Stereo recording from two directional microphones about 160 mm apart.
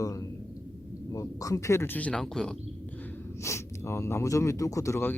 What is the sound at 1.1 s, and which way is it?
Speech, 20° left (ahead or behind).